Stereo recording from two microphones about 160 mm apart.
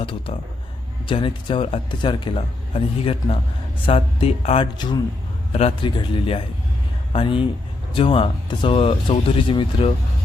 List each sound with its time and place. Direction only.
0.0 s speech: 30° left (ahead or behind)
5.5 s speech: 40° left (ahead or behind)